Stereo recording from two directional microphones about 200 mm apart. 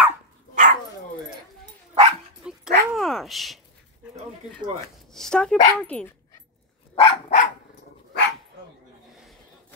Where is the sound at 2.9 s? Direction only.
Centre (ahead or behind).